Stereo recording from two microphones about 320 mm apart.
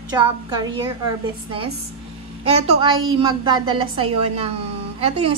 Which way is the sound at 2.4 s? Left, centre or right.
Centre.